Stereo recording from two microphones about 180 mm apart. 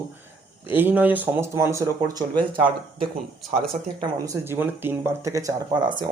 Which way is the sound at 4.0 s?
20° right (ahead or behind).